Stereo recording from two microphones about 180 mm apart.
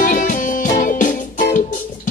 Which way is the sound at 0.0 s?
45° left (ahead or behind).